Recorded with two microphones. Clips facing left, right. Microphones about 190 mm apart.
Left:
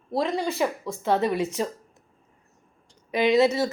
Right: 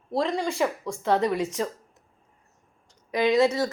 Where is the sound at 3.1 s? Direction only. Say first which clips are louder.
Left 1 dB; 25° left (ahead or behind).